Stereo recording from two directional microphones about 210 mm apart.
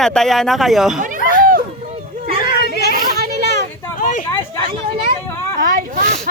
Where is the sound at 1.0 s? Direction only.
40° right (ahead or behind).